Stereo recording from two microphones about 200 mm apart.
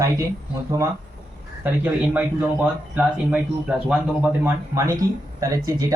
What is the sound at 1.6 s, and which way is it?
Speech, 10° right (ahead or behind).